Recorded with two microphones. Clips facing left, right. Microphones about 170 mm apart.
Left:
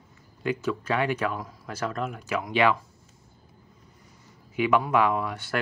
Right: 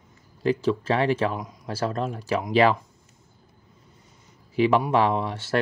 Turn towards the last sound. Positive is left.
turn(degrees=-30)  # may be behind; listen again after turning